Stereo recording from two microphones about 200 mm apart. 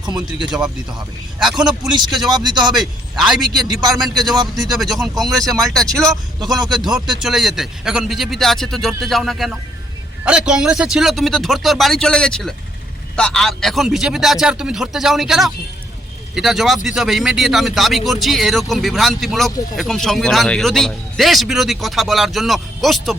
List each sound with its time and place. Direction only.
0.0 s speech: 20° right (ahead or behind)
1.4 s speech: centre (ahead or behind)
2.3 s speech: 20° right (ahead or behind)
2.7 s a man's voice: centre (ahead or behind)
4.3 s speech: 20° right (ahead or behind)
4.8 s speech: centre (ahead or behind)
6.4 s speech: 20° right (ahead or behind)
6.8 s speech: centre (ahead or behind)